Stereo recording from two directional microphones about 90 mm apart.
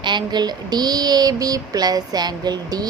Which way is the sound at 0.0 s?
55° right (ahead or behind).